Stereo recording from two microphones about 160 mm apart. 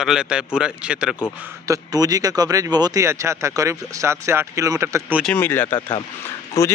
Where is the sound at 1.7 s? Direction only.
25° right (ahead or behind).